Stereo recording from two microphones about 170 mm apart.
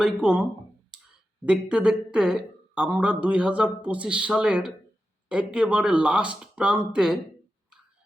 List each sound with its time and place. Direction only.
0.0 s speech: 5° right (ahead or behind)
1.5 s speech: 5° right (ahead or behind)